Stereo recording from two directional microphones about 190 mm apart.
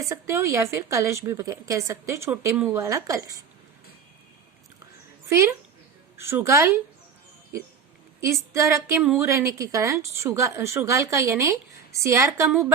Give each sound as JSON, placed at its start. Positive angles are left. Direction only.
{"t": 0.0, "sound": "a woman's voice", "side_deg": -15}
{"t": 5.3, "sound": "a woman's voice", "side_deg": -15}
{"t": 8.2, "sound": "a woman's voice", "side_deg": -15}